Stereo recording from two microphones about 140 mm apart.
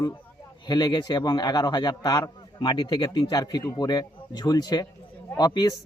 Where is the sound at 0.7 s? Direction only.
30° left (ahead or behind).